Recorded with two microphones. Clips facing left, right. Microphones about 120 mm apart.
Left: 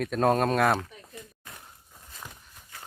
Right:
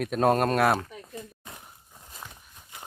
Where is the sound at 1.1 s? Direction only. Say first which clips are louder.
Right 4 dB; 25° right (ahead or behind).